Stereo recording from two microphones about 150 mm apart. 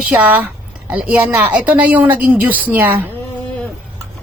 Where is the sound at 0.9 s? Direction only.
10° right (ahead or behind).